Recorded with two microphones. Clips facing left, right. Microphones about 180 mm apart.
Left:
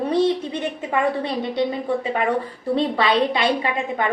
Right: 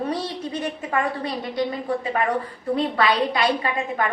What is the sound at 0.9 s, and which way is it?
Speech, 25° left (ahead or behind).